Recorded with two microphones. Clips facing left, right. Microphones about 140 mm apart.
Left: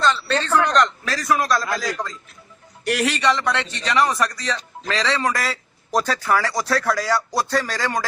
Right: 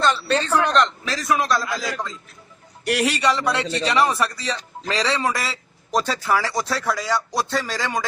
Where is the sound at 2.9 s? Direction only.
35° right (ahead or behind).